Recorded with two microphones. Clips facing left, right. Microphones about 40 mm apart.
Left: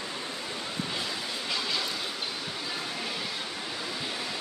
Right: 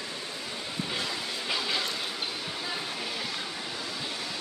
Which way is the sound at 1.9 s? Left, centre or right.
Centre.